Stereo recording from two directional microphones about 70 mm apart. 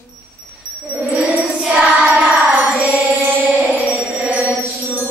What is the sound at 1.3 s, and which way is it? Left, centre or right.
Music, centre.